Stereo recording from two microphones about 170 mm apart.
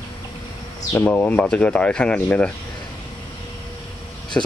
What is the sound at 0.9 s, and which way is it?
Speech, 10° left (ahead or behind).